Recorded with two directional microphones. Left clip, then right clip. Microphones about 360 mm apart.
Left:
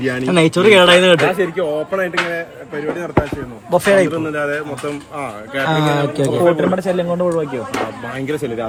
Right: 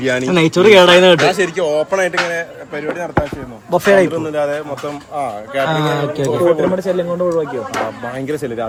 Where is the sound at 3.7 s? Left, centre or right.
Centre.